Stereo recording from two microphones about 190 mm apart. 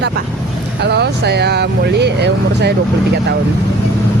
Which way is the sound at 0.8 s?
60° right (ahead or behind).